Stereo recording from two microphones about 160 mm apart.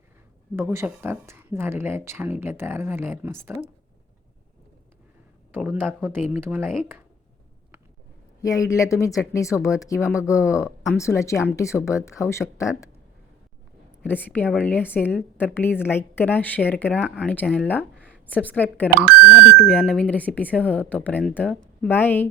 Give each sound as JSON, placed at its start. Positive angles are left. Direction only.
{"t": 0.5, "sound": "speech", "side_deg": -15}
{"t": 5.5, "sound": "speech", "side_deg": -10}
{"t": 8.4, "sound": "speech", "side_deg": 20}
{"t": 14.0, "sound": "speech", "side_deg": 10}
{"t": 18.9, "sound": "speech", "side_deg": -5}
{"t": 19.6, "sound": "speech", "side_deg": 5}